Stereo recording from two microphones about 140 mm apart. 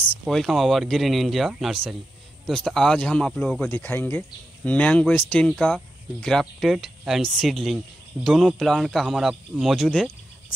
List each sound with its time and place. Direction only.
0.3 s speech: centre (ahead or behind)
3.6 s speech: 15° left (ahead or behind)